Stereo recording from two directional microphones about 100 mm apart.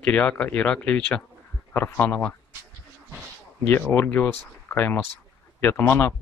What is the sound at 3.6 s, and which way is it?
Speech, 20° left (ahead or behind).